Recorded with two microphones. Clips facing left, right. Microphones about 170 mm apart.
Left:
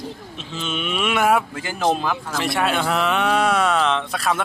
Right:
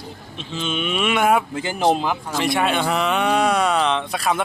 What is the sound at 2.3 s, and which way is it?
Speech, centre (ahead or behind).